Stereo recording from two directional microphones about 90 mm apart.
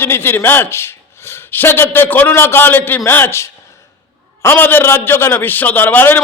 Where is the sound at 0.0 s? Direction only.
25° left (ahead or behind).